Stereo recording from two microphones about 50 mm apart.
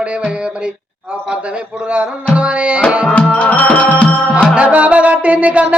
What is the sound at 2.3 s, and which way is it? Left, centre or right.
Music, right.